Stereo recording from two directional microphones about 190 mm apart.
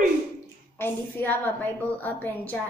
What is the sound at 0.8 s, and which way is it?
A woman's voice, 10° left (ahead or behind).